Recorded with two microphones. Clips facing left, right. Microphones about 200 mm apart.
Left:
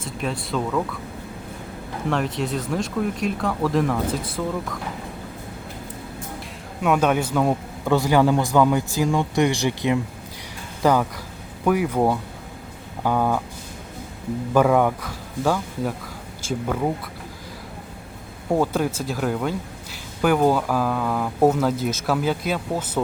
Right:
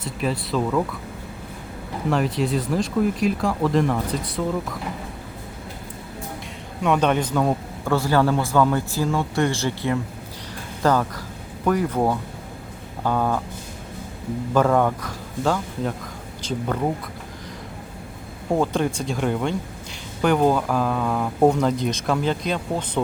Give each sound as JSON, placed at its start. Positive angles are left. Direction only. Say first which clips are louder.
{"t": 0.2, "sound": "speech", "louder": "right 2 dB", "side_deg": 0}
{"t": 2.0, "sound": "speech", "louder": "right 2 dB", "side_deg": 0}
{"t": 6.8, "sound": "speech", "louder": "even", "side_deg": 5}
{"t": 14.5, "sound": "speech", "louder": "left 1 dB", "side_deg": 10}
{"t": 18.5, "sound": "speech", "louder": "even", "side_deg": 5}